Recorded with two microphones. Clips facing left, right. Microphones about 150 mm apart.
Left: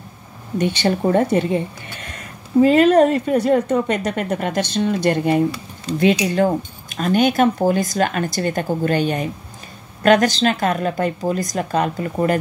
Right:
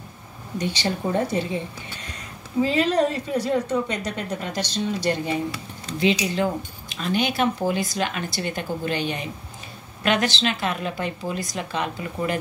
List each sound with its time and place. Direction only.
0.6 s a woman's voice: 60° left (ahead or behind)
2.6 s a woman's voice: 55° left (ahead or behind)